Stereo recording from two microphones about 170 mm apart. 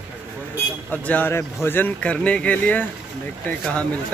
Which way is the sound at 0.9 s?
10° left (ahead or behind).